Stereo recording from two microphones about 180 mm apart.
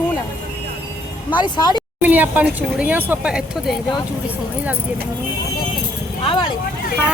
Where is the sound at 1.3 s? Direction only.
25° left (ahead or behind).